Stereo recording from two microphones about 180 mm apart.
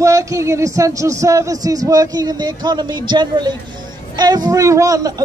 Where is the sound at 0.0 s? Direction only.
15° right (ahead or behind).